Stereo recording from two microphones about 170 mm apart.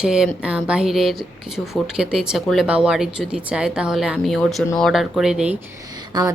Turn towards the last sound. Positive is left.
turn(degrees=-25)  # may be behind; listen again after turning